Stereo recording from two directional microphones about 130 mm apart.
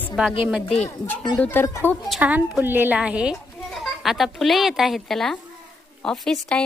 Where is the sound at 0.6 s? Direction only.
50° left (ahead or behind).